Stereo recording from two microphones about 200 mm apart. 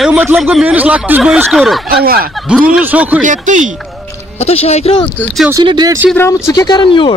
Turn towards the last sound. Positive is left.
turn(degrees=25)  # may be behind; listen again after turning